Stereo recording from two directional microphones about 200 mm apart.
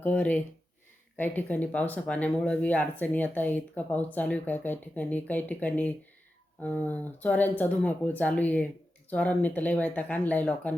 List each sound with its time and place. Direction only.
0.0 s speech: 10° left (ahead or behind)